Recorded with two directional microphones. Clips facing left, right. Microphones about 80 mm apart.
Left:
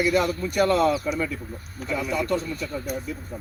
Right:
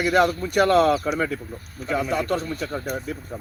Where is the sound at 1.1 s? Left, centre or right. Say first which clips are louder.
Right 3 dB; right.